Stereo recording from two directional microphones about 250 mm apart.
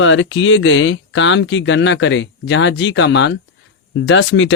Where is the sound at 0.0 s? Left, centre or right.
Left.